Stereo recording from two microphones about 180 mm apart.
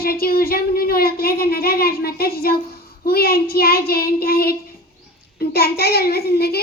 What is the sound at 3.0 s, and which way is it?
Child singing, 60° left (ahead or behind).